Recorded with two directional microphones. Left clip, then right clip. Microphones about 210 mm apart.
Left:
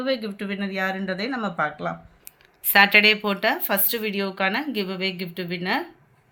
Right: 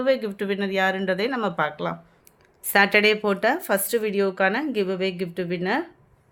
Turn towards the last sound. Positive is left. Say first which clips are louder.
# right 1 dB
turn(degrees=-50)  # may be behind; listen again after turning